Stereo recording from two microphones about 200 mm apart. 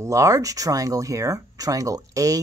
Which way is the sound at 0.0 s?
15° right (ahead or behind).